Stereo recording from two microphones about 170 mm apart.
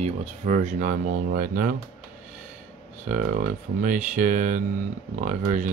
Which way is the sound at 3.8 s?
50° right (ahead or behind).